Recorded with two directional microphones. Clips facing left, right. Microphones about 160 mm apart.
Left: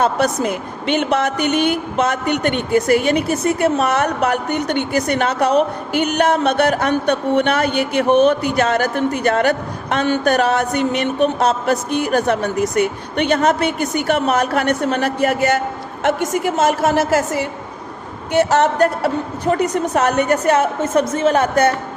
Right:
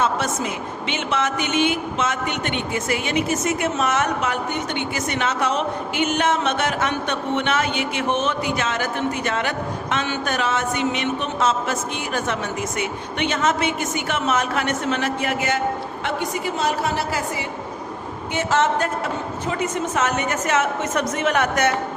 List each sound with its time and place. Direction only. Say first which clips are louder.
0.3 s a woman's voice: left 5 dB; 50° left (ahead or behind); by 21.7 s 30° left (ahead or behind)